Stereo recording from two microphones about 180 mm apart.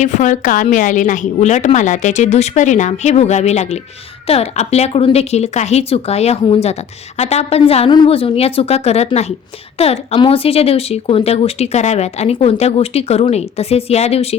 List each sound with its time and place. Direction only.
0.0 s speech: 45° left (ahead or behind)